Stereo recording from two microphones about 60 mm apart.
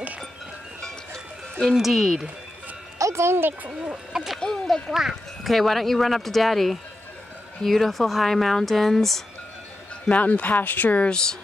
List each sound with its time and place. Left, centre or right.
0.8 s sheep: centre
1.8 s speech: centre
3.0 s music: right
3.3 s a child's voice: right
3.8 s speech: centre
4.4 s speech: centre
4.9 s speech: centre
10.0 s speech: left
11.1 s speech: centre